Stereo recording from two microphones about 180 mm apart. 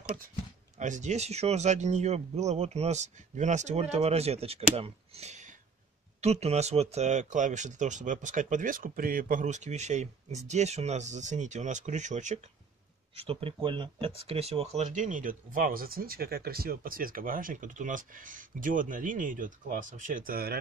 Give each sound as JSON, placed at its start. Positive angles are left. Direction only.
{"t": 0.7, "sound": "speech", "side_deg": -45}